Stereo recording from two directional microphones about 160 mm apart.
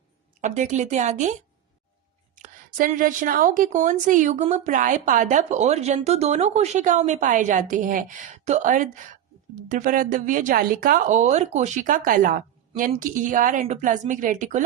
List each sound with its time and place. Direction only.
0.4 s a woman's voice: 50° right (ahead or behind)